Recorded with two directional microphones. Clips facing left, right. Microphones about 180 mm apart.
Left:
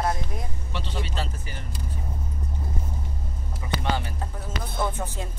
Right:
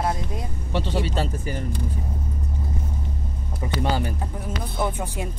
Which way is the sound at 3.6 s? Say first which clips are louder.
Right 2 dB; 35° right (ahead or behind).